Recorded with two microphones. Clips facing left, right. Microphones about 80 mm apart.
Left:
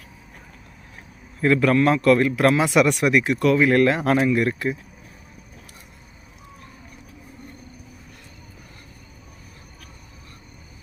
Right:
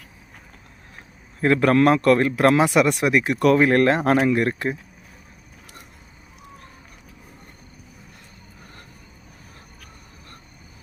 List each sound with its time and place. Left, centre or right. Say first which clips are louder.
1.4 s speech: right 1 dB; right
3.4 s speech: right 2 dB; right